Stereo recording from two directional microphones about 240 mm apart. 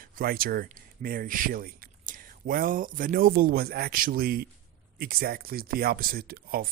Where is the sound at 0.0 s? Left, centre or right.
Right.